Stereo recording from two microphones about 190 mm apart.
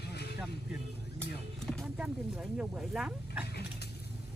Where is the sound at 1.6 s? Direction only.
Centre (ahead or behind).